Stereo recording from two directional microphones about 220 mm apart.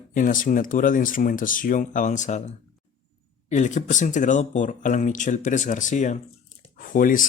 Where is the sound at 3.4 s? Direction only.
35° left (ahead or behind).